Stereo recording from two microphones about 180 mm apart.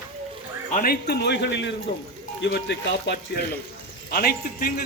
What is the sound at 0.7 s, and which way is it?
Speech, 55° left (ahead or behind).